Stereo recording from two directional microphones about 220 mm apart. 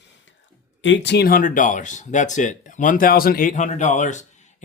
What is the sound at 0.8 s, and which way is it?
Speech, 55° left (ahead or behind).